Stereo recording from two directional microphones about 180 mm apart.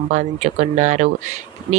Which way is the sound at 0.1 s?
40° right (ahead or behind).